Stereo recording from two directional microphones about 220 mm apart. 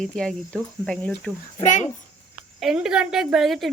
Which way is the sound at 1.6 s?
35° left (ahead or behind).